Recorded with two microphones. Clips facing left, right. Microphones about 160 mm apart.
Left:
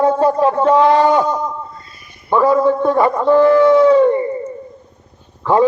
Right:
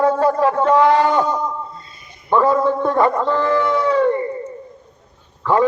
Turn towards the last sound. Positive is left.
turn(degrees=20)  # may be behind; listen again after turning